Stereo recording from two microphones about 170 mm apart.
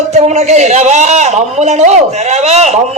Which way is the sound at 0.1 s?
40° right (ahead or behind).